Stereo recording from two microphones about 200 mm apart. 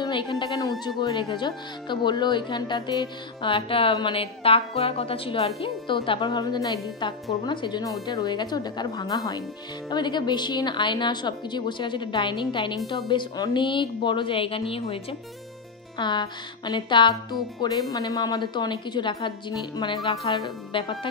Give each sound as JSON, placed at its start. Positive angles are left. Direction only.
{"t": 0.0, "sound": "a woman's voice", "side_deg": 20}